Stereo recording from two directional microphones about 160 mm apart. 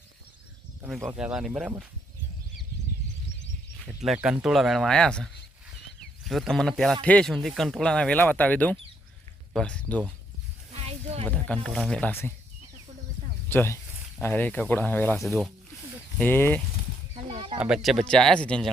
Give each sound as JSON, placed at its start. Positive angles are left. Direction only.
{"t": 0.9, "sound": "speech", "side_deg": -5}
{"t": 4.0, "sound": "speech", "side_deg": -5}
{"t": 10.8, "sound": "a sound", "side_deg": -40}
{"t": 11.3, "sound": "speech", "side_deg": 10}
{"t": 13.5, "sound": "speech", "side_deg": 15}
{"t": 17.2, "sound": "chicken", "side_deg": -35}
{"t": 17.8, "sound": "speech", "side_deg": 5}